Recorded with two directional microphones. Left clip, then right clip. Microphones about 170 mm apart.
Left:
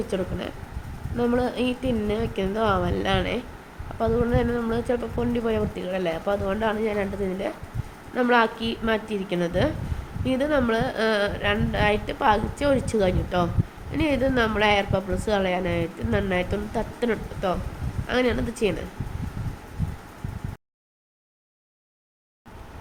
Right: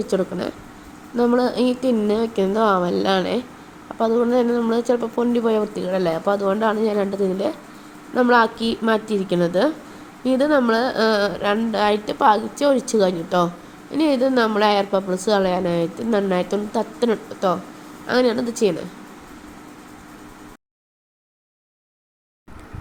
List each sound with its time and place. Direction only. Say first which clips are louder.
0.1 s a woman's voice: right 6 dB; 35° right (ahead or behind)